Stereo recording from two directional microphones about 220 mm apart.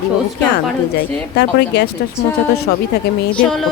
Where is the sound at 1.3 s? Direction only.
50° left (ahead or behind).